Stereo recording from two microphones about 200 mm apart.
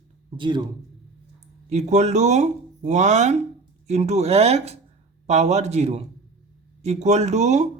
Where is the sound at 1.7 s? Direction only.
35° right (ahead or behind).